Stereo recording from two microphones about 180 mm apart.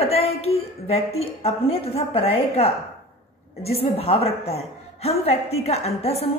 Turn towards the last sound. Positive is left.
turn(degrees=35)  # may be behind; listen again after turning